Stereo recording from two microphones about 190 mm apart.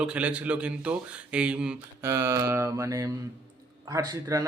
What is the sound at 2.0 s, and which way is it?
Mantra, 15° right (ahead or behind).